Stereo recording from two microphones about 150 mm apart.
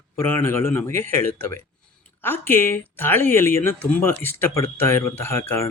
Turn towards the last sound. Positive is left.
turn(degrees=15)  # may be behind; listen again after turning